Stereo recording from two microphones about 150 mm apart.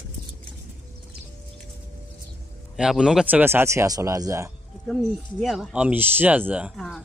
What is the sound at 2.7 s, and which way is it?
Speech, 5° right (ahead or behind).